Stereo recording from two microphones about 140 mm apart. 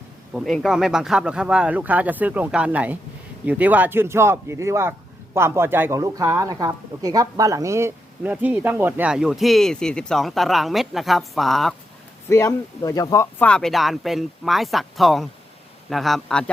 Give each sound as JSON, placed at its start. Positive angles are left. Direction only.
{"t": 0.3, "sound": "speech", "side_deg": 0}
{"t": 12.3, "sound": "speech", "side_deg": 20}
{"t": 13.4, "sound": "speech", "side_deg": 5}